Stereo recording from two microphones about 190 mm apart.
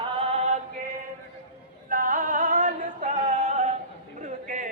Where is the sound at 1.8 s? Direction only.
45° right (ahead or behind).